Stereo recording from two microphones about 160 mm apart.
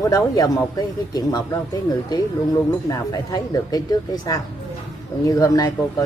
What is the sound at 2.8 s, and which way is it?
Speech, 20° left (ahead or behind).